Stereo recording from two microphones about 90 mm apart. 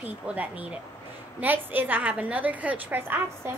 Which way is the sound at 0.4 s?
15° right (ahead or behind).